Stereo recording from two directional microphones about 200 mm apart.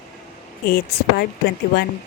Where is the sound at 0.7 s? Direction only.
50° left (ahead or behind).